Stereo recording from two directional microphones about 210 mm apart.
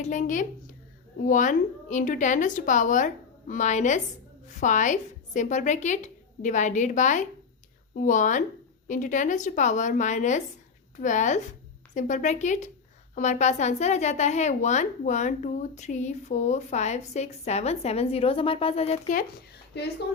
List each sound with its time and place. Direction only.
0.0 s a woman's voice: 35° left (ahead or behind)
19.7 s speech: 50° left (ahead or behind)